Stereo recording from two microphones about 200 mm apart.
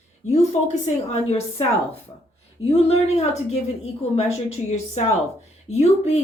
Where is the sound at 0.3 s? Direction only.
35° left (ahead or behind).